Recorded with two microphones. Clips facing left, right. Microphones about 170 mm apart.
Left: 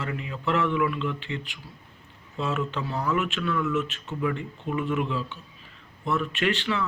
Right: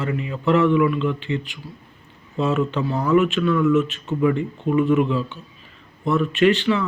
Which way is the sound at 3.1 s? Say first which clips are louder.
Right 11 dB; centre (ahead or behind).